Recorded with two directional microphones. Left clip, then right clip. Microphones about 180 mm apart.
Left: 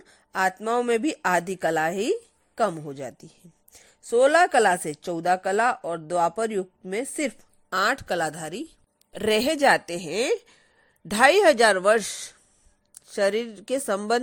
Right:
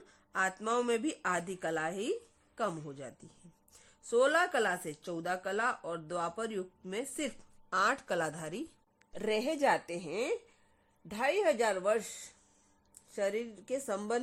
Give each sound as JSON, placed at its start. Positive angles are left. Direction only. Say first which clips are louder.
{"t": 0.1, "sound": "a sound", "louder": "left 9 dB", "side_deg": 30}
{"t": 0.6, "sound": "a woman's voice", "louder": "left 8 dB", "side_deg": 25}
{"t": 13.1, "sound": "speech", "louder": "left 11 dB", "side_deg": 35}